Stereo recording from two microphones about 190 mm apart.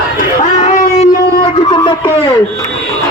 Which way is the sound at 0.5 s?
40° left (ahead or behind).